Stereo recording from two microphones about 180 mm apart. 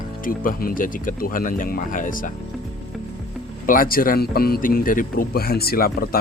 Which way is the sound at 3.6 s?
50° left (ahead or behind).